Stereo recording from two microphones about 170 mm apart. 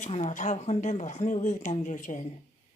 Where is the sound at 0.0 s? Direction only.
40° left (ahead or behind).